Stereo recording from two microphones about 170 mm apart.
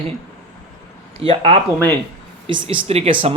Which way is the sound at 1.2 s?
35° right (ahead or behind).